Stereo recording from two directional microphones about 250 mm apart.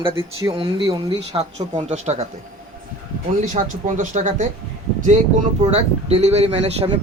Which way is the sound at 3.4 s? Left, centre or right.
Right.